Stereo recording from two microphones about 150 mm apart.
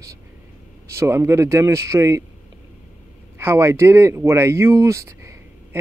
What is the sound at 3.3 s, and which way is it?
Speech, 15° right (ahead or behind).